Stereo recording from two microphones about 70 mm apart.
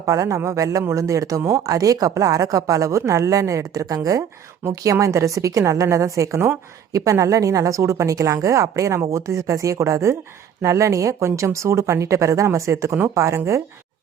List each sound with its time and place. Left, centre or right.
0.0 s speech: right